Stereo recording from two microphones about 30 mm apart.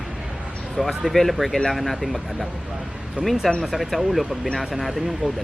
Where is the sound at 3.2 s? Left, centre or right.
Right.